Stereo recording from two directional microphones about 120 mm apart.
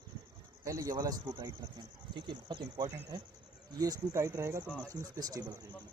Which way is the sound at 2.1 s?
40° right (ahead or behind).